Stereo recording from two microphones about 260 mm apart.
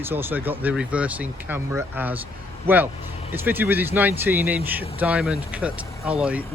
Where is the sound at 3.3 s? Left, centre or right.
Centre.